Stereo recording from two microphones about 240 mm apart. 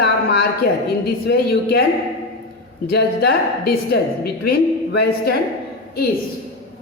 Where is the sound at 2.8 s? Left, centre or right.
Left.